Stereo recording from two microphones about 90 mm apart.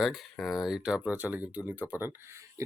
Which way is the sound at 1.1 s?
20° right (ahead or behind).